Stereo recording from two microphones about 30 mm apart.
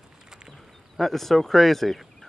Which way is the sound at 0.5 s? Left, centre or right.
Centre.